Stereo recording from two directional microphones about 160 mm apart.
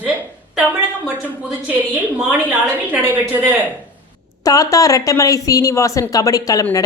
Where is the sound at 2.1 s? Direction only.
10° right (ahead or behind).